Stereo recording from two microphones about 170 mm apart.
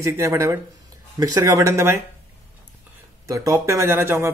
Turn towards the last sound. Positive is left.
turn(degrees=-15)  # may be behind; listen again after turning